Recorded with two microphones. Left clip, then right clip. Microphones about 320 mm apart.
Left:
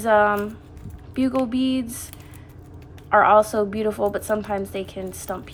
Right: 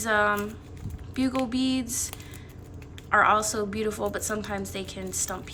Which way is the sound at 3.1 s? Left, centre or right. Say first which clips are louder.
Left 6 dB; centre.